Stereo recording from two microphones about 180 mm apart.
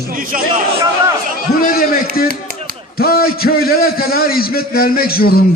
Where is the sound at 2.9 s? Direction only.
55° left (ahead or behind).